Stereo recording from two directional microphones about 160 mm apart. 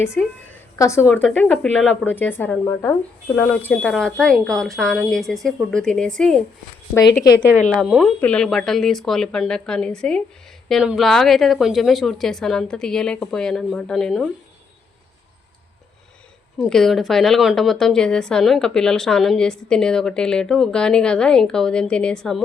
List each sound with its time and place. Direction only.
0.0 s a woman's voice: 15° left (ahead or behind)
7.9 s a woman's voice: 5° right (ahead or behind)
8.2 s a woman's voice: 5° left (ahead or behind)
16.6 s a woman's voice: centre (ahead or behind)